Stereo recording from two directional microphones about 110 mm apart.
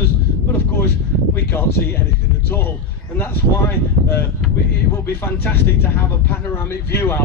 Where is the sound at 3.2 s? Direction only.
20° left (ahead or behind).